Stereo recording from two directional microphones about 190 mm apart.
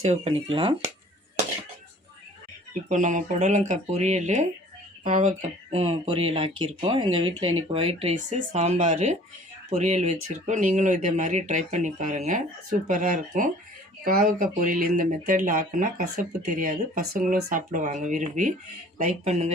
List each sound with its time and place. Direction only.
0.0 s speech: 35° right (ahead or behind)
2.9 s speech: 40° right (ahead or behind)